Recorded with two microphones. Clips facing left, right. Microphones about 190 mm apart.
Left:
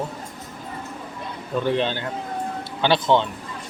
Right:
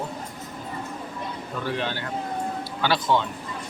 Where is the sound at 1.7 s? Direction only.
25° left (ahead or behind).